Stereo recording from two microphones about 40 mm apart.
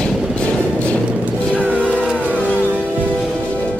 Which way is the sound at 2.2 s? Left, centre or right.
Right.